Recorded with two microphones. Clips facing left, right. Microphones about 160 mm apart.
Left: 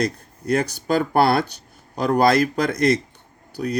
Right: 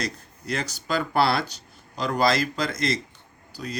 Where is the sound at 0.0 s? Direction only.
55° left (ahead or behind).